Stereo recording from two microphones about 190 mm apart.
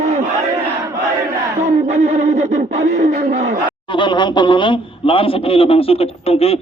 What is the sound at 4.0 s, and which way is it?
A man's voice, 25° left (ahead or behind).